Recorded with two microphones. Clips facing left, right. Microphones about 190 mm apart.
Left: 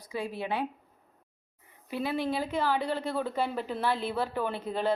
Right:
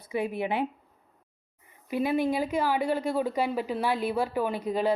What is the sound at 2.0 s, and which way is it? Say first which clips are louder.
Speech: right 4 dB; 15° right (ahead or behind).